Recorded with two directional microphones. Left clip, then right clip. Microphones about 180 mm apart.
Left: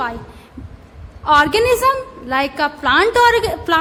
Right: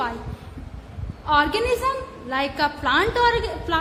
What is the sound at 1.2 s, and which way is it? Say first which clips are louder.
A woman's voice: left 7 dB; 35° left (ahead or behind).